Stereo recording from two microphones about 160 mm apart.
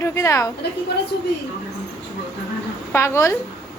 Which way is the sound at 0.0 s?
20° left (ahead or behind).